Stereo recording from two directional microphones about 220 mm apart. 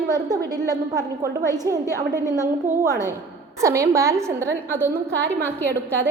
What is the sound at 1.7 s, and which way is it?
A woman's voice, 15° right (ahead or behind).